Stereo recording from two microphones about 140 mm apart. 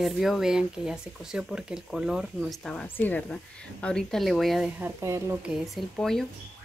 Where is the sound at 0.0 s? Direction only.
Centre (ahead or behind).